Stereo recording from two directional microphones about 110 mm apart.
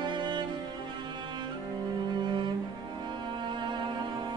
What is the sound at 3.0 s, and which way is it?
Music, 45° right (ahead or behind).